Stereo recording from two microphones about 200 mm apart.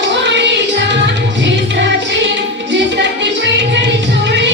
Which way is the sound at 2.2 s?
65° right (ahead or behind).